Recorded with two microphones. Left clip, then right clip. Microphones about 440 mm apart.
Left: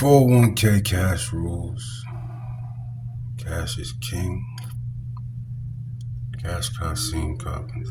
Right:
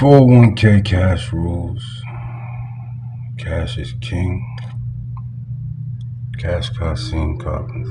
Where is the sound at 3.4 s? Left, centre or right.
Left.